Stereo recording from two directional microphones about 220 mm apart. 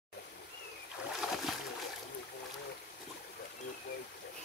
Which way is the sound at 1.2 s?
Centre (ahead or behind).